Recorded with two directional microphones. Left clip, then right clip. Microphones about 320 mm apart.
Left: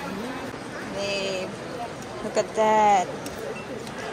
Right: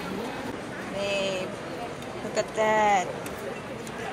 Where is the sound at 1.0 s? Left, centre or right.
Centre.